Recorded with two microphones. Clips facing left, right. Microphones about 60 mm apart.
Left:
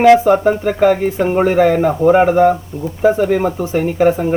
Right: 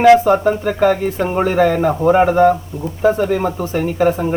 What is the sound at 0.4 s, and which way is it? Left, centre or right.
A man's voice, centre.